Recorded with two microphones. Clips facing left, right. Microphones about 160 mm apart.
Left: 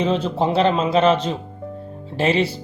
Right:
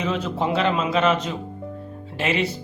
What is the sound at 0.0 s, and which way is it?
Speech, 30° left (ahead or behind).